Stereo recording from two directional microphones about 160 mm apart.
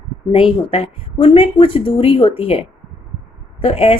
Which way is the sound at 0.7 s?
40° left (ahead or behind).